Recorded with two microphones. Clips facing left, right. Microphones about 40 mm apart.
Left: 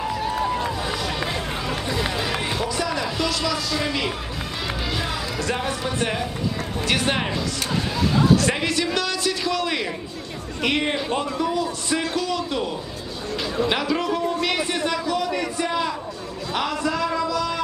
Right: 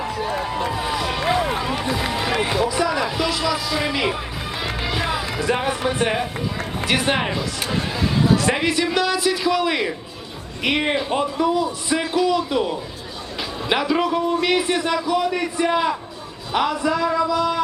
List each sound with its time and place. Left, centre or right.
0.6 s run: right
1.2 s run: right
1.5 s run: centre
2.6 s a sound: centre
4.6 s music: right
6.0 s speech: centre
6.8 s speech: centre